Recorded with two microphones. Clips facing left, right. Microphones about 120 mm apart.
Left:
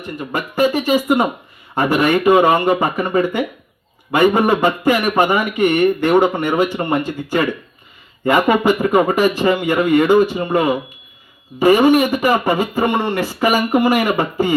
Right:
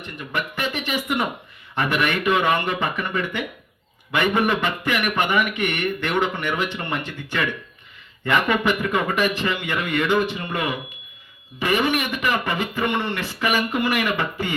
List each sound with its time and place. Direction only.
0.2 s speech: 35° left (ahead or behind)